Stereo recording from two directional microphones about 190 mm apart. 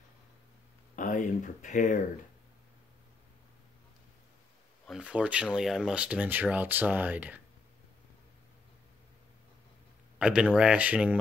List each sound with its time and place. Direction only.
0.9 s speech: 45° left (ahead or behind)
4.8 s speech: 5° right (ahead or behind)
10.1 s speech: 5° right (ahead or behind)